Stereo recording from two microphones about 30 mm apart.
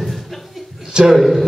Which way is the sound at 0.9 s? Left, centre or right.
Right.